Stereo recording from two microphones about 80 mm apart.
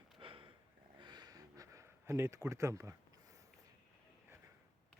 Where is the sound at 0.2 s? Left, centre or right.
Right.